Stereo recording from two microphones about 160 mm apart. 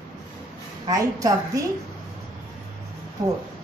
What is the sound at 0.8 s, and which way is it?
Speech, 20° right (ahead or behind).